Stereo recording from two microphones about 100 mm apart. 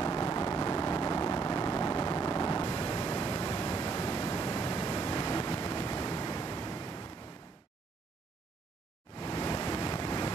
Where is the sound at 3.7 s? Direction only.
70° left (ahead or behind).